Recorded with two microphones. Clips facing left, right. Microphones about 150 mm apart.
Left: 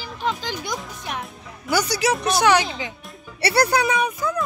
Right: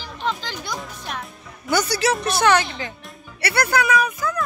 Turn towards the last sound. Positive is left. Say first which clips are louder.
# right 1 dB
turn(degrees=25)  # may be behind; listen again after turning